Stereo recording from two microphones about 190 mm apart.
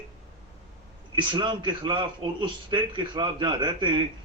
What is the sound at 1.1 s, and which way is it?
A man's voice, 25° right (ahead or behind).